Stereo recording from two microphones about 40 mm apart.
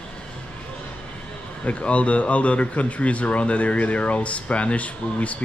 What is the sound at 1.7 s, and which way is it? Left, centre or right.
Speech, left.